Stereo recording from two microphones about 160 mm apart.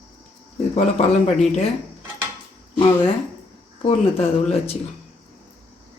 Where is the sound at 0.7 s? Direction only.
45° left (ahead or behind).